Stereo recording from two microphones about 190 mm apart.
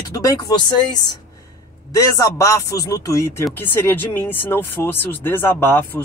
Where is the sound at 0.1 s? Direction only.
20° left (ahead or behind).